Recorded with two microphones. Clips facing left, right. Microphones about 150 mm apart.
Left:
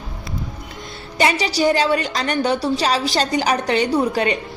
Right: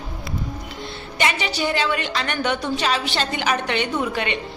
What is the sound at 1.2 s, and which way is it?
A woman's voice, 35° left (ahead or behind).